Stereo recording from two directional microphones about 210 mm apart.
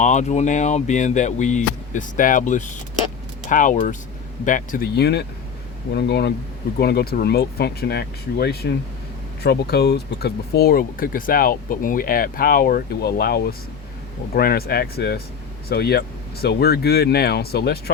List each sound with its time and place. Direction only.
0.0 s speech: 35° left (ahead or behind)